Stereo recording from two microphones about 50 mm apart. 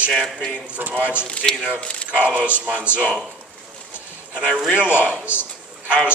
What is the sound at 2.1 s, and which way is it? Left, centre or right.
Speech, right.